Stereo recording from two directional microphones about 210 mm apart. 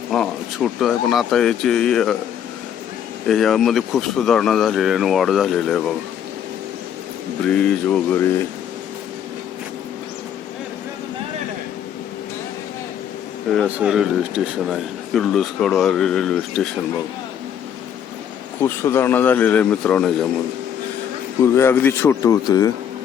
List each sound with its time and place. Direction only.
0.1 s speech: centre (ahead or behind)
3.2 s speech: centre (ahead or behind)
7.4 s speech: 5° left (ahead or behind)
13.5 s speech: 5° right (ahead or behind)
18.6 s speech: 10° left (ahead or behind)
21.4 s speech: 10° left (ahead or behind)